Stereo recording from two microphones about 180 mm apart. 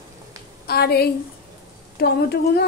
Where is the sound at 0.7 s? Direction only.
60° left (ahead or behind).